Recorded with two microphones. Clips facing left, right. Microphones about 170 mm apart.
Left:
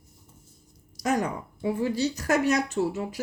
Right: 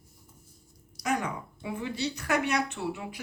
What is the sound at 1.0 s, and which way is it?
A woman's voice, 40° left (ahead or behind).